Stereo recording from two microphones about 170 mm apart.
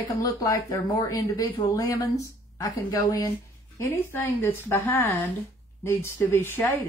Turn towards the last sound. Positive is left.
turn(degrees=10)  # may be behind; listen again after turning